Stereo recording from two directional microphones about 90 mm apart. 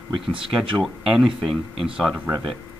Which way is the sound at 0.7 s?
Centre (ahead or behind).